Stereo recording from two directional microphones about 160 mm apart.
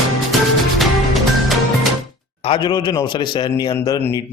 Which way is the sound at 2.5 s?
25° left (ahead or behind).